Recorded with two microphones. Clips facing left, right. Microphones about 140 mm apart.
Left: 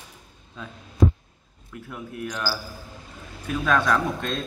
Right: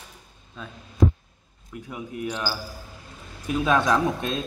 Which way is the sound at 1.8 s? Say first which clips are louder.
Right 2 dB; 5° right (ahead or behind).